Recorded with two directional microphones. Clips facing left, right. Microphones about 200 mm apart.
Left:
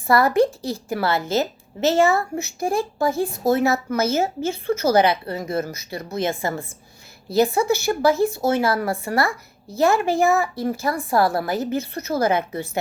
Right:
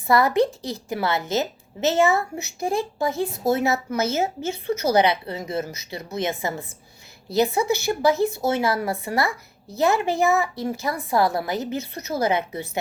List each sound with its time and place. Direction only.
0.1 s a woman's voice: 20° right (ahead or behind)